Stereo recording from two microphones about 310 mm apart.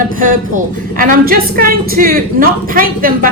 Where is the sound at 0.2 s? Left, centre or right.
Right.